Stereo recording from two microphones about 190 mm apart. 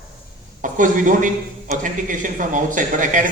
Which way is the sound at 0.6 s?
40° right (ahead or behind).